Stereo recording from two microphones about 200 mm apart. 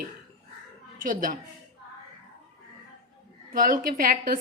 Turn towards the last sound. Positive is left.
turn(degrees=-45)  # may be behind; listen again after turning